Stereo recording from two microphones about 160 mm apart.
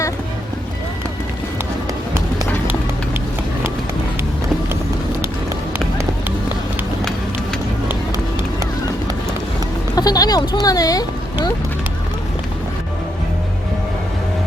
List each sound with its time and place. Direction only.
9.9 s vehicle: 25° left (ahead or behind)